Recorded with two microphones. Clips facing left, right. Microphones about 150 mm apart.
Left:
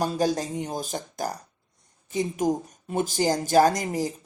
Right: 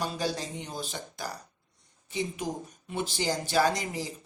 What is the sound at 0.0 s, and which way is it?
Speech, 45° left (ahead or behind).